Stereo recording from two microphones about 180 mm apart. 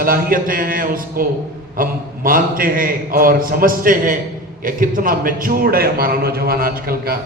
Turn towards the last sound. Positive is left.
turn(degrees=-55)  # may be behind; listen again after turning